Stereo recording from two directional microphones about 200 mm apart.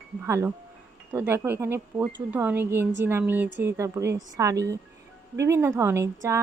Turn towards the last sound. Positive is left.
turn(degrees=-15)  # may be behind; listen again after turning